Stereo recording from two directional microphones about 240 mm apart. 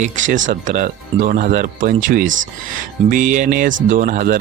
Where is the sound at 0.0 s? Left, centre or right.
Right.